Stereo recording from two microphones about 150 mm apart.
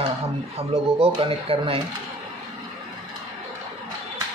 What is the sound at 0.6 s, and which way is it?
Speech, 40° right (ahead or behind).